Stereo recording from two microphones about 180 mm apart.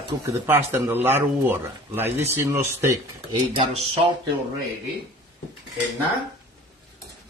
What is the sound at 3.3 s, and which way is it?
Speech, 30° right (ahead or behind).